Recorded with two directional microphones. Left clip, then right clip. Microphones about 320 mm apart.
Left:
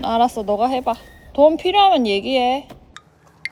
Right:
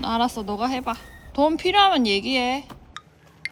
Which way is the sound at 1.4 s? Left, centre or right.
Centre.